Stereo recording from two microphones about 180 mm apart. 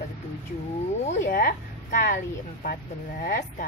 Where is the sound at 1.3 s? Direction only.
50° left (ahead or behind).